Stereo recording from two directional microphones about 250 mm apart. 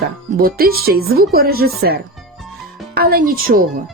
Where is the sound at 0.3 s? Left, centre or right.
Right.